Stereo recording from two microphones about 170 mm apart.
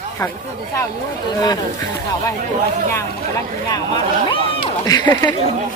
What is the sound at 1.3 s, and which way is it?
Speech, 25° left (ahead or behind).